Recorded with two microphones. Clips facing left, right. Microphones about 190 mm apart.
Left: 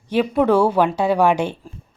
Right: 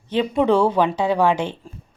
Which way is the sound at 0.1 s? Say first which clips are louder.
Left 1 dB; 10° left (ahead or behind).